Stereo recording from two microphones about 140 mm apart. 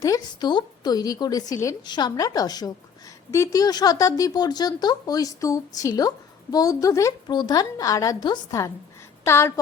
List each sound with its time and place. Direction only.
0.0 s speech: 25° left (ahead or behind)